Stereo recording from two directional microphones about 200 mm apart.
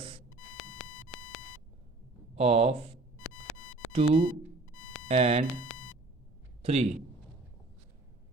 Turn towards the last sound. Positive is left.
turn(degrees=-30)  # may be behind; listen again after turning